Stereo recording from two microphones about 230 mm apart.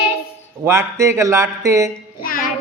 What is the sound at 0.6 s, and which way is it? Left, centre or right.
Speech, centre.